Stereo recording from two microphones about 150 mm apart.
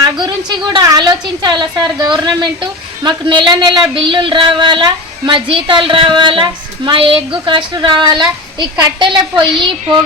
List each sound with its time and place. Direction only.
0.7 s a woman's voice: 25° right (ahead or behind)